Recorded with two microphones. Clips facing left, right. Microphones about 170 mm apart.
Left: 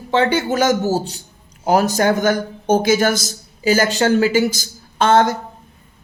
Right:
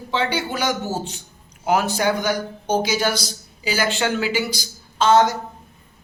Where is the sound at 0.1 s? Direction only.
50° left (ahead or behind).